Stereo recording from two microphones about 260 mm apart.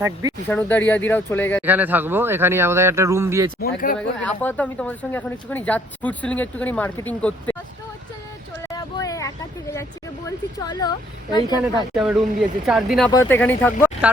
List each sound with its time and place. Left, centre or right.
0.0 s a man's voice: centre
0.4 s speech: centre
1.6 s a man's voice: centre
3.6 s speech: left
3.9 s speech: centre
8.7 s a sound: centre
10.2 s speech: centre
12.6 s speech: centre
13.1 s speech: centre
14.0 s speech: centre